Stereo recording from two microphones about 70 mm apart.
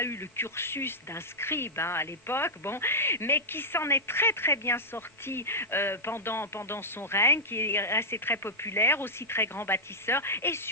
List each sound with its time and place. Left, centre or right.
0.0 s speech: left